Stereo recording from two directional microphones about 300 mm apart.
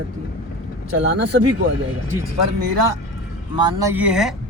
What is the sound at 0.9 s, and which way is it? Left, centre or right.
Speech, right.